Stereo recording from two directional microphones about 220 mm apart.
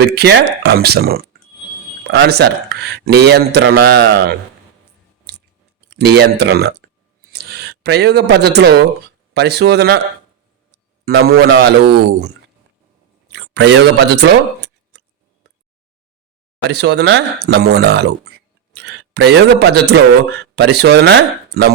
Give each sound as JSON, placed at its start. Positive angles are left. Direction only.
{"t": 0.0, "sound": "a man's voice", "side_deg": -45}
{"t": 5.3, "sound": "chewing", "side_deg": -50}
{"t": 5.9, "sound": "a man's voice", "side_deg": -50}
{"t": 11.0, "sound": "a man's voice", "side_deg": -45}
{"t": 13.3, "sound": "a sound", "side_deg": -50}
{"t": 16.6, "sound": "a man's voice", "side_deg": -50}